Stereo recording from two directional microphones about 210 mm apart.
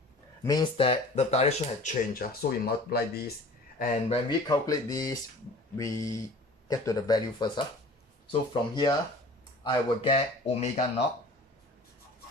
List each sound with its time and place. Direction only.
0.4 s speech: 20° left (ahead or behind); by 3.2 s 50° left (ahead or behind)
4.1 s speech: 20° left (ahead or behind)